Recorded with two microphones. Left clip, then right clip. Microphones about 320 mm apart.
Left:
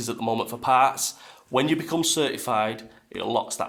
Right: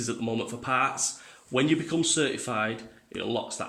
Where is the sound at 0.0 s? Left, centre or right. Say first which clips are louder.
Left 5 dB; centre.